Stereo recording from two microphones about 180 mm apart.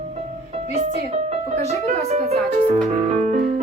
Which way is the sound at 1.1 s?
35° right (ahead or behind).